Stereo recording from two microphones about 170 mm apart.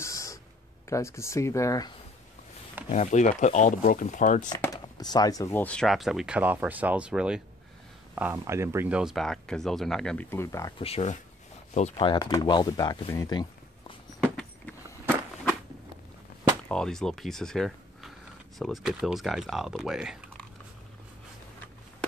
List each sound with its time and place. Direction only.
0.0 s a sound: 20° left (ahead or behind)
0.8 s speech: 15° left (ahead or behind)
2.9 s speech: 45° left (ahead or behind)
4.8 s speech: 25° left (ahead or behind); by 10.2 s 5° left (ahead or behind)
10.3 s speech: 15° left (ahead or behind)
10.8 s speech: 35° left (ahead or behind)
12.0 s speech: 25° left (ahead or behind)
13.1 s a sound: 20° left (ahead or behind)
14.2 s a sound: 5° left (ahead or behind)
16.6 s speech: 5° left (ahead or behind)